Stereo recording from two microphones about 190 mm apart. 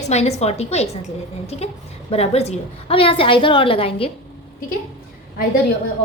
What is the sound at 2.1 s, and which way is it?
A woman's voice, 35° left (ahead or behind).